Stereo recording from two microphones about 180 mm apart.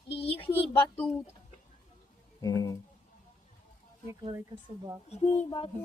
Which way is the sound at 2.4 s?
20° left (ahead or behind).